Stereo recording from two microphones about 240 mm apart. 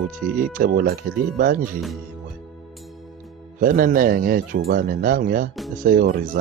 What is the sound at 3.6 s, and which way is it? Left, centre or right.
Speech, right.